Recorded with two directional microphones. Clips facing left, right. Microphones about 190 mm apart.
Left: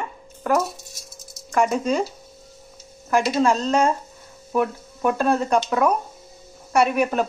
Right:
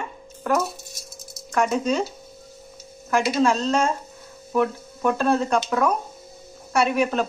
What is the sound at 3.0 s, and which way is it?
Speech, centre (ahead or behind).